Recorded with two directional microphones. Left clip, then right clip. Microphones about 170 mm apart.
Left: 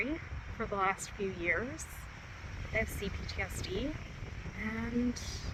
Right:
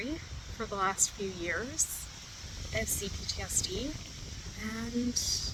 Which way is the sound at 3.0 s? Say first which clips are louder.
Right 1 dB; 15° right (ahead or behind).